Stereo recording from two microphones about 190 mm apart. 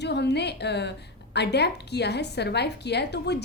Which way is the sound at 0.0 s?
60° left (ahead or behind).